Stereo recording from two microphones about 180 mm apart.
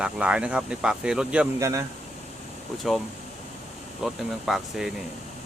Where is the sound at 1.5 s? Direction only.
15° right (ahead or behind).